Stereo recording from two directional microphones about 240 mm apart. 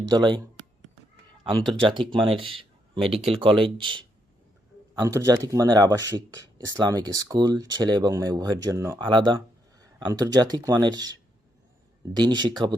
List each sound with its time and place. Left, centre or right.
0.1 s speech: centre
2.1 s speech: right